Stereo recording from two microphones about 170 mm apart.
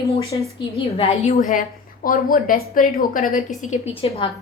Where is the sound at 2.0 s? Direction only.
55° left (ahead or behind).